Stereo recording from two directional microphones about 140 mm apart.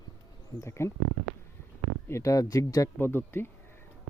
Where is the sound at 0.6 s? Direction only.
20° left (ahead or behind).